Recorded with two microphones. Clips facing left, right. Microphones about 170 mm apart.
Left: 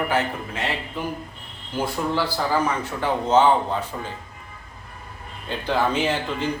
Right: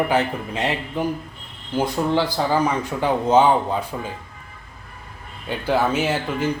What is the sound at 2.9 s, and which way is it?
A man's voice, 15° right (ahead or behind).